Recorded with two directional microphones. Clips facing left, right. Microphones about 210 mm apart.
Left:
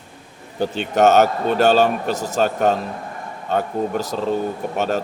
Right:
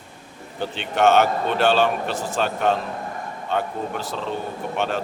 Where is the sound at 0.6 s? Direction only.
40° left (ahead or behind).